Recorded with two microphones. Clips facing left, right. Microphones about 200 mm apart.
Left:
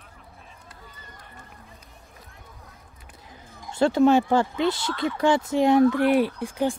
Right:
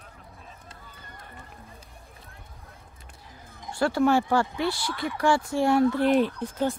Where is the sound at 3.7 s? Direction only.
20° left (ahead or behind).